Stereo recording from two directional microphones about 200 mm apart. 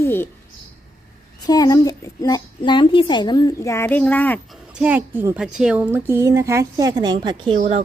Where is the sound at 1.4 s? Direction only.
20° left (ahead or behind).